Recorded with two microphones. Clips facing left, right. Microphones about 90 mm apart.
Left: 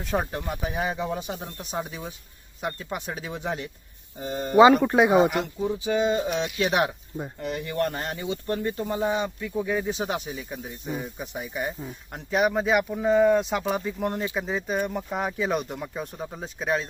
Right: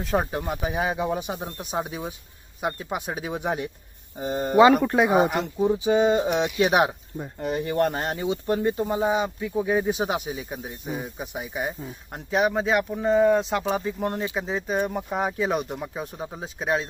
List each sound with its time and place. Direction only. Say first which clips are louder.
0.0 s speech: right 3 dB; centre (ahead or behind)
1.4 s speech: right 3 dB; 30° right (ahead or behind)
1.9 s speech: right 4 dB; 15° right (ahead or behind)
4.5 s speech: left 1 dB; centre (ahead or behind)
5.1 s speech: even; 15° right (ahead or behind)